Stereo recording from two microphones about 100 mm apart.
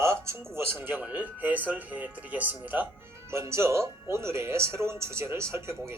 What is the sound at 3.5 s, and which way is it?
Speech, 25° right (ahead or behind).